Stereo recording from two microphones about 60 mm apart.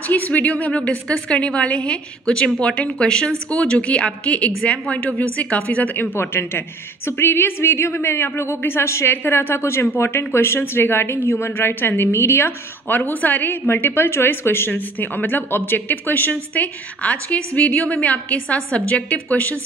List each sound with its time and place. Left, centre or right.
0.1 s a woman's voice: left
6.1 s a woman's voice: left